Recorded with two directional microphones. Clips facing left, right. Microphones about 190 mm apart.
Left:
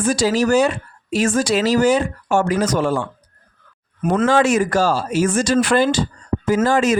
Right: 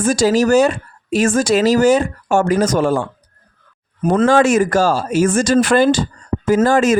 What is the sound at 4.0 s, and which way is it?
Speech, 35° right (ahead or behind).